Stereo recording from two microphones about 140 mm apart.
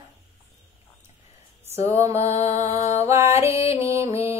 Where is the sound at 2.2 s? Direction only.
50° left (ahead or behind).